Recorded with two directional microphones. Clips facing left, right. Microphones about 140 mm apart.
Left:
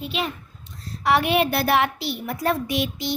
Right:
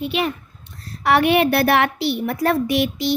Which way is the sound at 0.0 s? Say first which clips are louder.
Right 6 dB; 60° right (ahead or behind).